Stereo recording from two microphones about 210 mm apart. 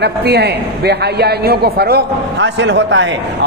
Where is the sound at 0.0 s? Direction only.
50° right (ahead or behind).